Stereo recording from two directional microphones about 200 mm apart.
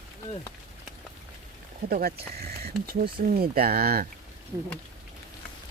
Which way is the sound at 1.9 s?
50° right (ahead or behind).